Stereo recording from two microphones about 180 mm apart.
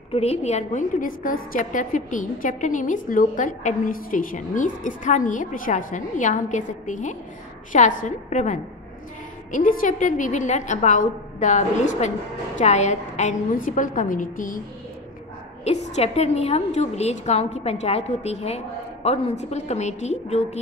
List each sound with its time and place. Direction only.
0.1 s a woman's voice: 35° left (ahead or behind)
15.6 s a woman's voice: 35° left (ahead or behind)